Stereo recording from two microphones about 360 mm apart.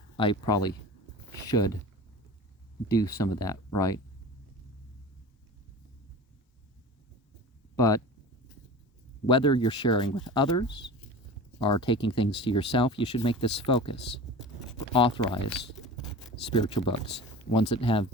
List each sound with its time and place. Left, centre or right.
0.2 s speech: centre
2.9 s speech: centre
7.8 s speech: centre
9.2 s speech: centre
13.9 s speech: left
14.9 s speech: centre